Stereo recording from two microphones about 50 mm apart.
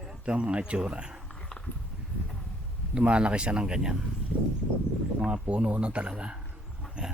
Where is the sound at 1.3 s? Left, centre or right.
Centre.